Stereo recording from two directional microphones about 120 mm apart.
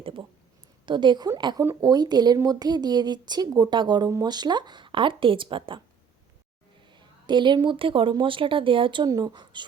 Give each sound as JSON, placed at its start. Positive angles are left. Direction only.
{"t": 0.0, "sound": "a sound", "side_deg": -45}
{"t": 0.9, "sound": "speech", "side_deg": -40}
{"t": 6.9, "sound": "a woman's voice", "side_deg": -40}